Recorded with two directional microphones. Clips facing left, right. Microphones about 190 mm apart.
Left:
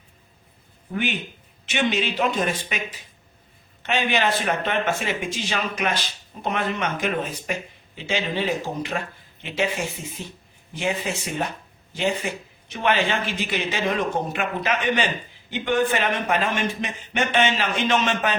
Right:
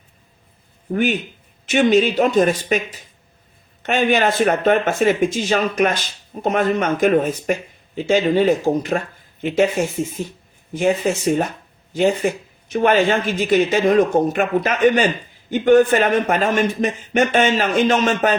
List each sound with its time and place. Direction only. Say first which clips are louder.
1.6 s speech: right 9 dB; 45° right (ahead or behind)
3.8 s speech: right 6 dB; 45° right (ahead or behind)